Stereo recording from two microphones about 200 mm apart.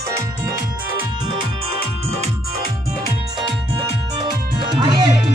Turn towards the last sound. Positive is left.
turn(degrees=-25)  # may be behind; listen again after turning